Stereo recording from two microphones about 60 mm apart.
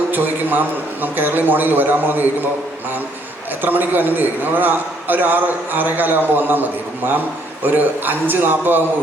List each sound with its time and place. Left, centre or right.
0.1 s a man's voice: right
3.6 s a man's voice: right